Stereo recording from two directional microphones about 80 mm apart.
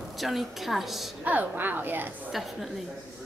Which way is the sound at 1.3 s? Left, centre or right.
Right.